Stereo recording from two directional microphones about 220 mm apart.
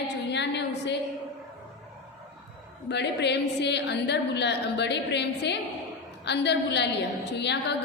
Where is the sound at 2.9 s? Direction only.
50° left (ahead or behind).